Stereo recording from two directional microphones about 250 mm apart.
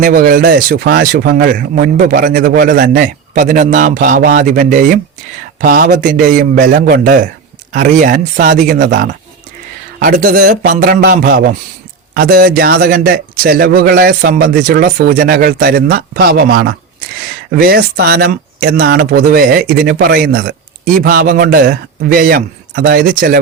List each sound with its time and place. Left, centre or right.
0.0 s speech: right